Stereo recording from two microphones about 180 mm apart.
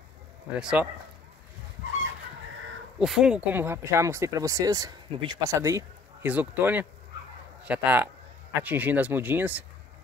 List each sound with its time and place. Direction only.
0.5 s speech: 5° right (ahead or behind)
3.0 s speech: centre (ahead or behind)